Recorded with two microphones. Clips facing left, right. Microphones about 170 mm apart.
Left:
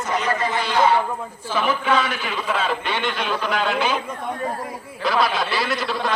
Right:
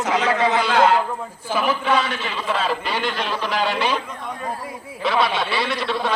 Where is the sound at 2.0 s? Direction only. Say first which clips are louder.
Even; 30° right (ahead or behind).